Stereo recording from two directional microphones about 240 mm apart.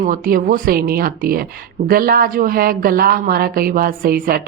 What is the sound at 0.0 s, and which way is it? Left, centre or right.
A woman's voice, right.